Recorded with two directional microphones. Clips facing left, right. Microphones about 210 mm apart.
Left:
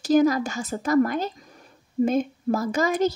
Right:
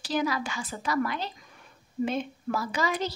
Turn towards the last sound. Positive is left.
turn(degrees=45)  # may be behind; listen again after turning